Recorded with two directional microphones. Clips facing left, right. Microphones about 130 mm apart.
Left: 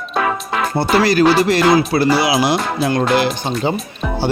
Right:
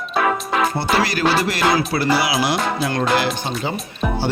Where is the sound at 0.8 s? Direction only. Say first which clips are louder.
Left 6 dB; 30° left (ahead or behind).